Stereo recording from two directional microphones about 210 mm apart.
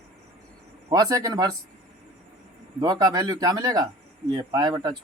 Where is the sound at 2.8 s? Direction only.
20° right (ahead or behind).